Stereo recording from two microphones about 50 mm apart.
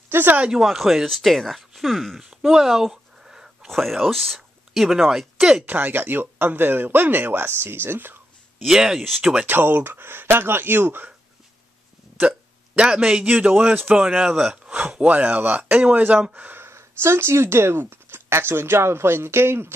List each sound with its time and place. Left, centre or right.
0.1 s speech: right
0.5 s speech: centre
2.2 s a sound: centre
3.6 s speech: centre
4.4 s a sound: centre
5.4 s speech: centre
5.7 s speech: right
8.6 s speech: centre
9.2 s speech: right
9.5 s speech: right
12.7 s speech: centre
13.2 s speech: right
16.5 s speech: right